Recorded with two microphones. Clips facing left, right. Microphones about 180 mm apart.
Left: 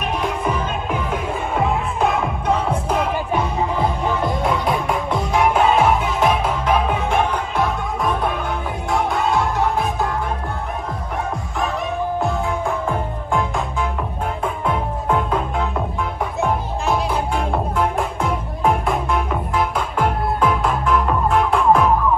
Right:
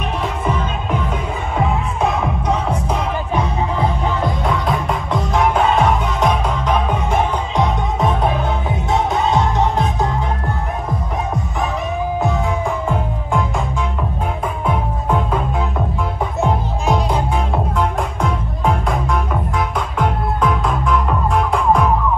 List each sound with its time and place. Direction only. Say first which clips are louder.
0.2 s music: right 2 dB; 10° left (ahead or behind)
7.5 s music: right 3 dB; 20° right (ahead or behind)
12.8 s music: right 2 dB; centre (ahead or behind)
14.7 s music: right 1 dB; centre (ahead or behind)
17.7 s music: right 1 dB; centre (ahead or behind)
20.0 s music: even; 5° left (ahead or behind)